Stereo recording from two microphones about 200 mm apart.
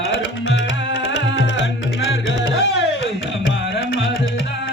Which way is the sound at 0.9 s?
60° left (ahead or behind).